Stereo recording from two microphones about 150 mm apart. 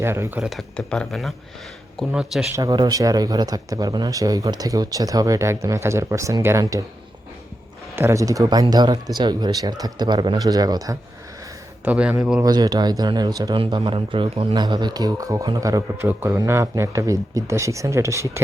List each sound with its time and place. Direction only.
0.0 s speech: 15° right (ahead or behind)
2.5 s speech: 25° right (ahead or behind)
7.9 s speech: 20° right (ahead or behind)
11.9 s a man's voice: 10° right (ahead or behind)
12.4 s speech: 25° right (ahead or behind)